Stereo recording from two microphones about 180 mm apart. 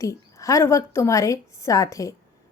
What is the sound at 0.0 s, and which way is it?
A woman's voice, 20° left (ahead or behind).